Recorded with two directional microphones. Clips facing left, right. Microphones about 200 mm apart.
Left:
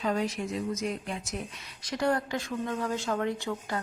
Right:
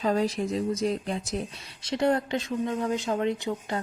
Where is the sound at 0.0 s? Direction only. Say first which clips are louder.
Right 4 dB; 35° right (ahead or behind).